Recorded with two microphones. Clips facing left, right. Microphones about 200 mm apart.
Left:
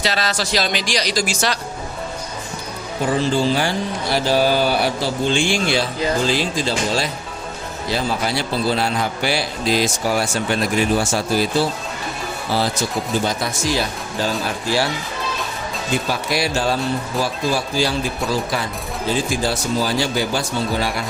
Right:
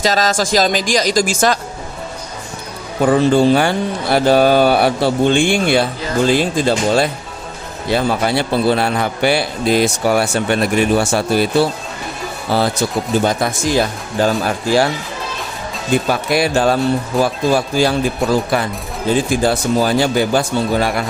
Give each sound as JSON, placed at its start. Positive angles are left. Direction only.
{"t": 0.0, "sound": "speech", "side_deg": -45}
{"t": 3.0, "sound": "speech", "side_deg": -60}
{"t": 16.0, "sound": "speech", "side_deg": -55}